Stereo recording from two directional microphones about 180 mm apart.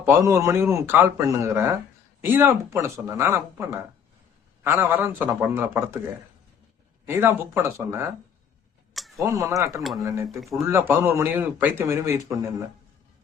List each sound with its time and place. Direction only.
0.0 s a man's voice: 15° right (ahead or behind)
7.1 s a man's voice: 10° right (ahead or behind)
8.9 s tick-tock: centre (ahead or behind)
9.2 s a man's voice: 15° right (ahead or behind)
10.2 s speech: centre (ahead or behind)
10.7 s a man's voice: 10° right (ahead or behind)